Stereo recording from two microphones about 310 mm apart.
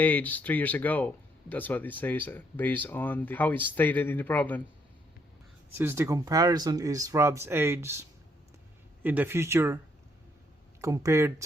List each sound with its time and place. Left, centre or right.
0.0 s speech: centre
5.7 s speech: centre
9.0 s speech: centre
10.8 s speech: centre